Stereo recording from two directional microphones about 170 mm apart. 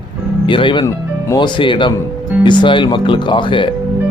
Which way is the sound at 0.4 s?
30° left (ahead or behind).